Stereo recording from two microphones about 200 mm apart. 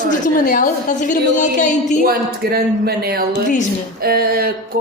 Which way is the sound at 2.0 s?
50° right (ahead or behind).